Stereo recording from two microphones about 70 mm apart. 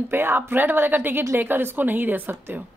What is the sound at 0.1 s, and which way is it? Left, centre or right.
A woman's voice, right.